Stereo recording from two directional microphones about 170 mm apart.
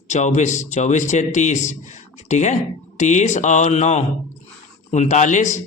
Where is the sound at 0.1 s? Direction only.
45° left (ahead or behind).